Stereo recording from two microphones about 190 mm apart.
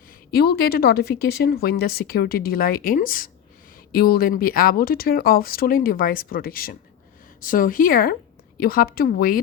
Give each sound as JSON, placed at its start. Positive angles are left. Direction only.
{"t": 0.3, "sound": "speech", "side_deg": 55}